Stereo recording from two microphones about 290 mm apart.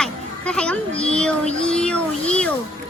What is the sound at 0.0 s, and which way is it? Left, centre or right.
Children playing, centre.